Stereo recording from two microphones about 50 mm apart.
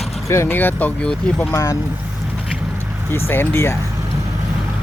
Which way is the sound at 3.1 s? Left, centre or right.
Left.